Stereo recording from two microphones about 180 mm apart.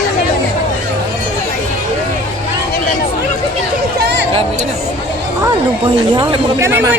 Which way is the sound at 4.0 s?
70° right (ahead or behind).